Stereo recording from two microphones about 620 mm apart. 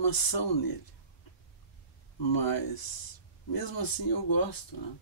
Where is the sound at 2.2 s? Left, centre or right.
Left.